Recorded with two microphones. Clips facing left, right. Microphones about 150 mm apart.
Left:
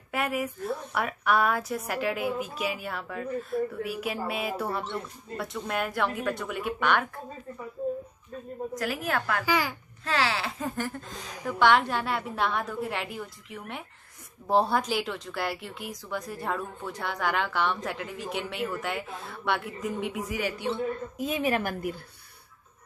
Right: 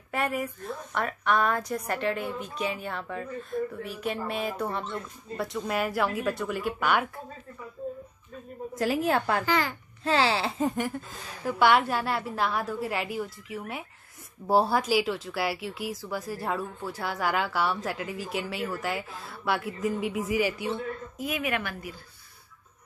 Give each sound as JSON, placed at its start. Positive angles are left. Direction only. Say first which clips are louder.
{"t": 0.1, "sound": "a woman's voice", "louder": "even", "side_deg": 5}
{"t": 8.7, "sound": "a woman's voice", "louder": "right 5 dB", "side_deg": -25}
{"t": 9.5, "sound": "a child's voice", "louder": "left 3 dB", "side_deg": 10}
{"t": 10.0, "sound": "a woman's voice", "louder": "right 3 dB", "side_deg": -30}
{"t": 10.8, "sound": "a sound", "louder": "right 2 dB", "side_deg": -5}
{"t": 11.4, "sound": "a woman's voice", "louder": "even", "side_deg": -5}
{"t": 21.2, "sound": "a woman's voice", "louder": "left 3 dB", "side_deg": 30}